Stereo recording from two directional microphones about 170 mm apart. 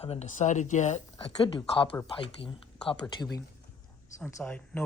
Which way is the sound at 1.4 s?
30° left (ahead or behind).